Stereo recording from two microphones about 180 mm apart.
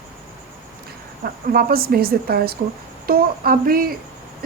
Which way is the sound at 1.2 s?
60° right (ahead or behind).